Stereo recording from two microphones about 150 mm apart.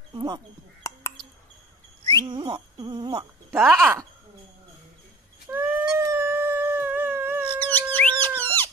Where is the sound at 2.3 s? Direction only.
30° right (ahead or behind).